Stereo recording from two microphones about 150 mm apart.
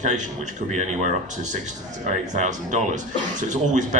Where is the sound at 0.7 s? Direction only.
50° right (ahead or behind).